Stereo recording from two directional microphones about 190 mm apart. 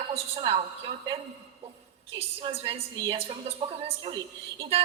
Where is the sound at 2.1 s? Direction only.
30° right (ahead or behind).